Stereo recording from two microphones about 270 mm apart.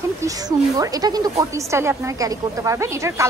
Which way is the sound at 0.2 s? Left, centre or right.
Centre.